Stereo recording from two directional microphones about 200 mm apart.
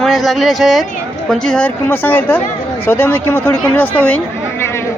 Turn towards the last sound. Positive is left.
turn(degrees=10)  # may be behind; listen again after turning